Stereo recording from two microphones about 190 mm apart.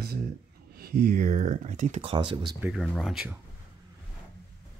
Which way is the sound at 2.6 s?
5° right (ahead or behind).